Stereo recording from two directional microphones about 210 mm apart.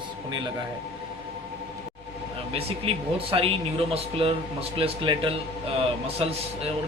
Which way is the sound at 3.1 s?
30° right (ahead or behind).